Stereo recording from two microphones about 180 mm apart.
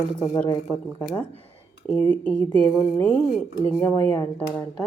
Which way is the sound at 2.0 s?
30° left (ahead or behind).